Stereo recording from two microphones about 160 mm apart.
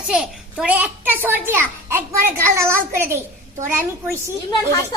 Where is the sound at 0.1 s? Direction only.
5° right (ahead or behind).